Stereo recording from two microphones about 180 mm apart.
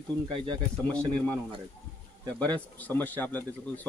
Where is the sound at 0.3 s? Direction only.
25° right (ahead or behind).